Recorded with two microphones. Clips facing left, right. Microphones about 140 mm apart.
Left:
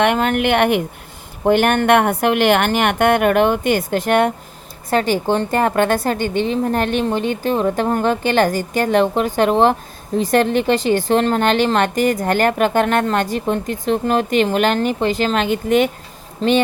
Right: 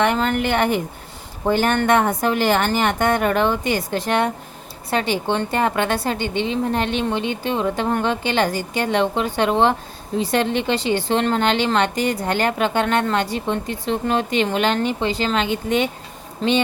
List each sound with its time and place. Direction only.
0.0 s a woman's voice: 60° left (ahead or behind)